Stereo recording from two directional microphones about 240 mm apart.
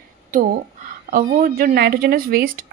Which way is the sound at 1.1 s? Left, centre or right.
Right.